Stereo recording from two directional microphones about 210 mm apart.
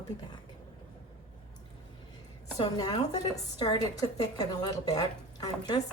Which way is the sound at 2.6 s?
20° left (ahead or behind).